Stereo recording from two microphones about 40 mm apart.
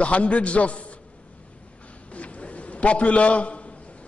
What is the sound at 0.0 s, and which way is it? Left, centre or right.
Speech, left.